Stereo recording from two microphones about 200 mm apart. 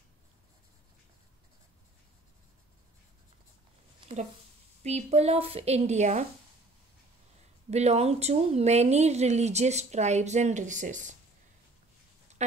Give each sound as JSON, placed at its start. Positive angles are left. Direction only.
{"t": 4.8, "sound": "a woman's voice", "side_deg": -30}
{"t": 7.7, "sound": "a woman's voice", "side_deg": -35}
{"t": 12.4, "sound": "speech", "side_deg": -35}